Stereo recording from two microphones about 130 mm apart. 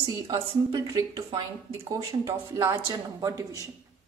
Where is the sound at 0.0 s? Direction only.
35° right (ahead or behind).